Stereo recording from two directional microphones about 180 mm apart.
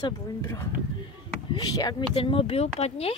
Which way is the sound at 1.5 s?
25° left (ahead or behind).